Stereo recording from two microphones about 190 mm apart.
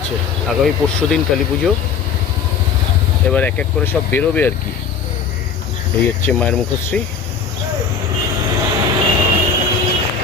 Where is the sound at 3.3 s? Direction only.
10° left (ahead or behind).